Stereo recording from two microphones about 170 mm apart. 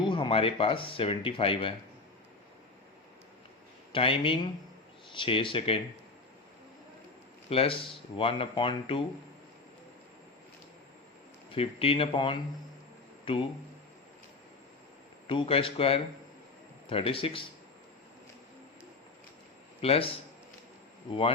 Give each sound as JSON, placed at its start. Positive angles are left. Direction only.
{"t": 0.0, "sound": "speech", "side_deg": 30}
{"t": 3.9, "sound": "speech", "side_deg": 30}
{"t": 7.5, "sound": "speech", "side_deg": 35}
{"t": 11.5, "sound": "speech", "side_deg": 35}
{"t": 15.3, "sound": "speech", "side_deg": 30}
{"t": 19.8, "sound": "speech", "side_deg": 35}